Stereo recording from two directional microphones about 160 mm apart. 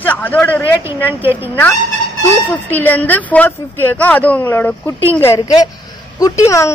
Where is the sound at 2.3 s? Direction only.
15° left (ahead or behind).